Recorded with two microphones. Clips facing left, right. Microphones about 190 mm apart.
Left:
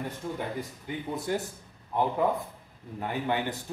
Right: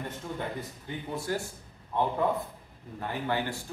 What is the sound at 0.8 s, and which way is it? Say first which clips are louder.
Speech: left 1 dB; 20° left (ahead or behind).